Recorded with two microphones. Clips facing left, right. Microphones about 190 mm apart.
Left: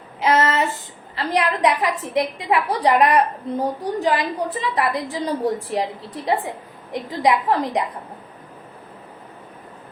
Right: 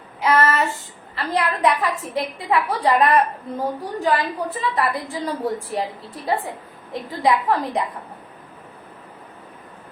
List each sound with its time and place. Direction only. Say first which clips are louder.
0.2 s a woman's voice: even; 20° left (ahead or behind)